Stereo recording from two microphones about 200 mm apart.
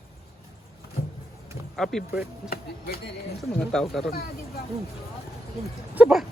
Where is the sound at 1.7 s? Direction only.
Centre (ahead or behind).